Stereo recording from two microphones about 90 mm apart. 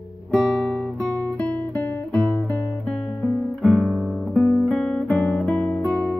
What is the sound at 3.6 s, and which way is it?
Guitar, 5° right (ahead or behind).